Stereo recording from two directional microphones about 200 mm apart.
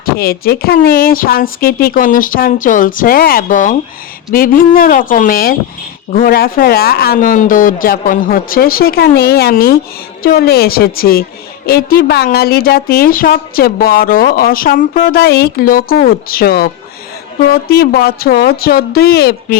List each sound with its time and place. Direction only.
0.0 s a woman's voice: 50° left (ahead or behind)